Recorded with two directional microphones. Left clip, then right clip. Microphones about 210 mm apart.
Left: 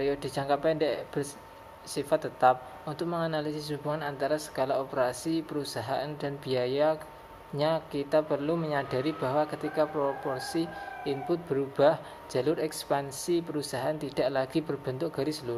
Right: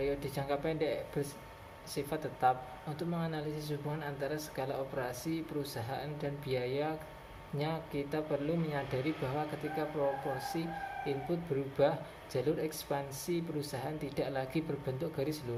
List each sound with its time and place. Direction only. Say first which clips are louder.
0.0 s speech: left 6 dB; 20° left (ahead or behind)